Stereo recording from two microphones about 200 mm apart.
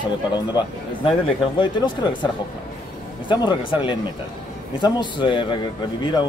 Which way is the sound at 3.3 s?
25° left (ahead or behind).